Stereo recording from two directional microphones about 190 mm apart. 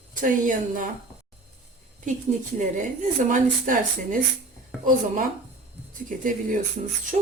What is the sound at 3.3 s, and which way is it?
Speech, 45° right (ahead or behind).